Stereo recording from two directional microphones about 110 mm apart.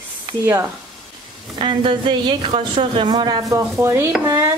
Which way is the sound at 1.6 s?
50° right (ahead or behind).